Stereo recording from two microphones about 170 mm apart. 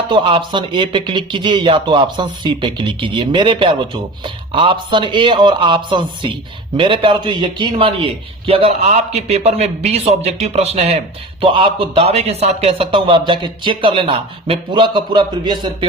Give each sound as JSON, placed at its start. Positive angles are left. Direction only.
{"t": 0.1, "sound": "speech", "side_deg": -30}